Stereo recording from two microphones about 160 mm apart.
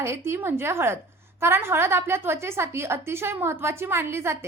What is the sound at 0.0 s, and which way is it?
A woman's voice, 15° right (ahead or behind).